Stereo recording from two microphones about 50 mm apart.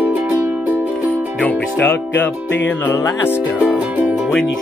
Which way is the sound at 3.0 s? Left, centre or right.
Left.